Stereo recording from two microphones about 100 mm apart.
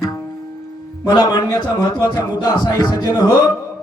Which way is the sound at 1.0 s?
40° left (ahead or behind).